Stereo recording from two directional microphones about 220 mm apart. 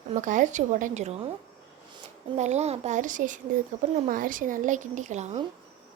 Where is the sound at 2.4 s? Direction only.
30° right (ahead or behind).